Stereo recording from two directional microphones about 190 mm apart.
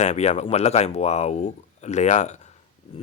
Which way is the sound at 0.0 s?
35° left (ahead or behind).